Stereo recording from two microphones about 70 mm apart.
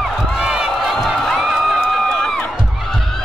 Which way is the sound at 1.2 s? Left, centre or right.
Centre.